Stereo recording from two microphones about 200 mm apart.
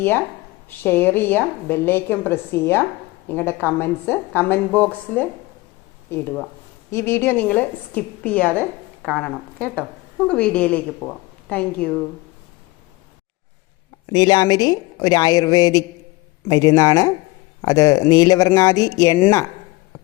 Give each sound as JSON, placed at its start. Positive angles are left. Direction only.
{"t": 0.8, "sound": "a woman's voice", "side_deg": 10}
{"t": 6.1, "sound": "a woman's voice", "side_deg": 10}
{"t": 14.1, "sound": "a woman's voice", "side_deg": 20}